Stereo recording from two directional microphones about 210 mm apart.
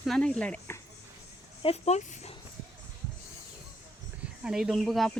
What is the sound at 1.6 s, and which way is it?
Speech, 30° left (ahead or behind).